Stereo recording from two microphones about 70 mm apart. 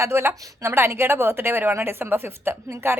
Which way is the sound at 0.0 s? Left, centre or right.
Right.